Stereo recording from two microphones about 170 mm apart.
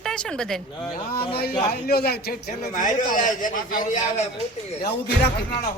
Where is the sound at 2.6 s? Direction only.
50° left (ahead or behind).